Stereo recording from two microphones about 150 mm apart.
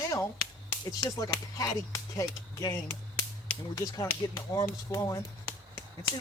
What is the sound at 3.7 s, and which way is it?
Speech, 25° left (ahead or behind).